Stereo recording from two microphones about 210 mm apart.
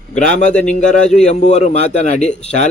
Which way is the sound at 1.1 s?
30° left (ahead or behind).